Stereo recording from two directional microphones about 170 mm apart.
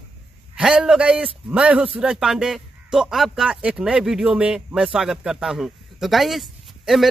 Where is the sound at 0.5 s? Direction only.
5° right (ahead or behind).